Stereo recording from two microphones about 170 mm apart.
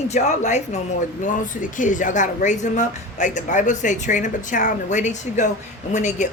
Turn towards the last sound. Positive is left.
turn(degrees=45)  # may be behind; listen again after turning